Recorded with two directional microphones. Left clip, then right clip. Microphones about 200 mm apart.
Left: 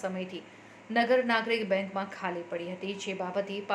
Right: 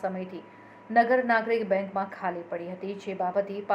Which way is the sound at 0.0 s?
25° left (ahead or behind).